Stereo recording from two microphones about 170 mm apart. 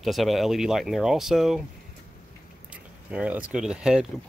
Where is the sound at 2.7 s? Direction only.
5° right (ahead or behind).